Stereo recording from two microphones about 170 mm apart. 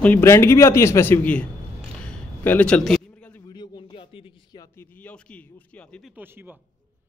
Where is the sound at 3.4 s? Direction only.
25° left (ahead or behind).